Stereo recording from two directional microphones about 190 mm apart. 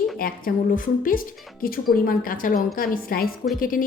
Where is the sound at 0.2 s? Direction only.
50° left (ahead or behind).